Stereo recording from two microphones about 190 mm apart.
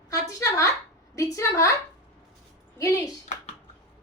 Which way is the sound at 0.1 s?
15° left (ahead or behind).